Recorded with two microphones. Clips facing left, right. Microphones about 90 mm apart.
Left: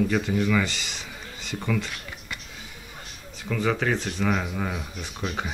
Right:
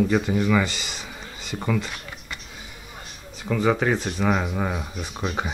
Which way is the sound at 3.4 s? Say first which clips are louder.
Right 4 dB; 10° right (ahead or behind).